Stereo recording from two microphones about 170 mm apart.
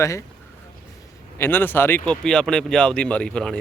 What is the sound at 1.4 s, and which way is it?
Speech, 10° left (ahead or behind).